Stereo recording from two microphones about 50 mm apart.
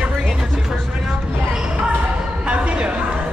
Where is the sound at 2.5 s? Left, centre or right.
Right.